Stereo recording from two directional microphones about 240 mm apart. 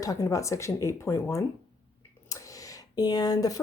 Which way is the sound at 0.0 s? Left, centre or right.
Centre.